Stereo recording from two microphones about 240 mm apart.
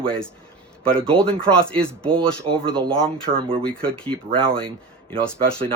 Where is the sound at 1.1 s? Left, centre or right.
Centre.